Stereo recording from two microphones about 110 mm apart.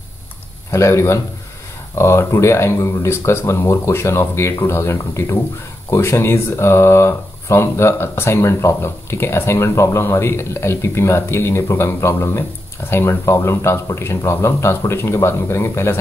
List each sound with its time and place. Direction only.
0.7 s speech: 25° left (ahead or behind)